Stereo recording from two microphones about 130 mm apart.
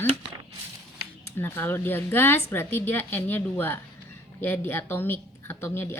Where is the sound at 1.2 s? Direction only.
15° left (ahead or behind).